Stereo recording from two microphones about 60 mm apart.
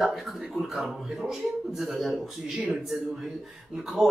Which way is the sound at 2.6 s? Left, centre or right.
Centre.